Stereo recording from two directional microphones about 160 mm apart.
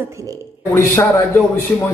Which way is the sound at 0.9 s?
15° left (ahead or behind).